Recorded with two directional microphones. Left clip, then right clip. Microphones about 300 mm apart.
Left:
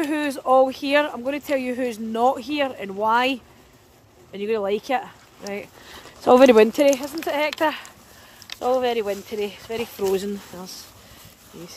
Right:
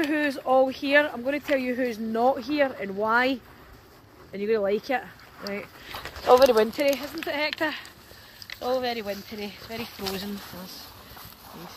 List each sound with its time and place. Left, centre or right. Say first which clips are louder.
0.0 s speech: left 2 dB; centre
4.3 s speech: left 1 dB; centre
6.3 s speech: left 5 dB; left; by 7.8 s centre
8.5 s a sound: left 6 dB; left
8.7 s speech: left 6 dB; centre